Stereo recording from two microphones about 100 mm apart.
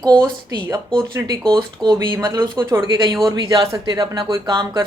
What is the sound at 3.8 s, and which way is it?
Speech, 50° right (ahead or behind).